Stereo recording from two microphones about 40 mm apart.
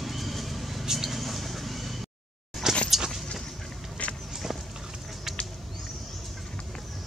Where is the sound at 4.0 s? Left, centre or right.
Left.